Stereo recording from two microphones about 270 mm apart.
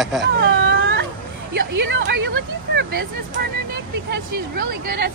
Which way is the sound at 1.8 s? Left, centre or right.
Right.